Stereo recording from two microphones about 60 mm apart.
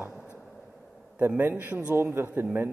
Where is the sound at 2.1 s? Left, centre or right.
Right.